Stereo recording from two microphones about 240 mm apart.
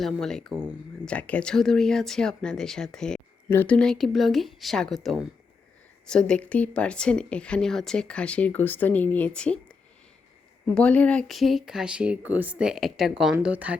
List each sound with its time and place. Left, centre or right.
0.0 s speech: centre
10.8 s speech: centre